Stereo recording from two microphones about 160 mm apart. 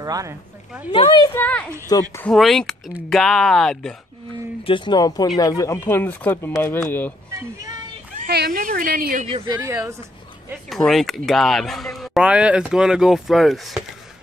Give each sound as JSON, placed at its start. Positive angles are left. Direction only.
{"t": 0.0, "sound": "speech", "side_deg": -20}
{"t": 0.9, "sound": "speech", "side_deg": 30}
{"t": 1.3, "sound": "speech", "side_deg": 10}
{"t": 1.9, "sound": "speech", "side_deg": 20}
{"t": 2.2, "sound": "speech", "side_deg": 0}
{"t": 4.6, "sound": "speech", "side_deg": 30}
{"t": 8.3, "sound": "a woman's voice", "side_deg": -75}
{"t": 9.5, "sound": "a woman's voice", "side_deg": -15}
{"t": 10.7, "sound": "speech", "side_deg": 0}